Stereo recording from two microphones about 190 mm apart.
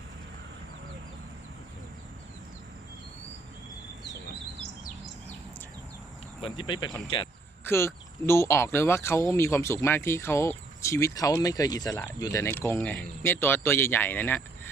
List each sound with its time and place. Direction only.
6.4 s speech: 25° left (ahead or behind)
7.6 s speech: 15° left (ahead or behind)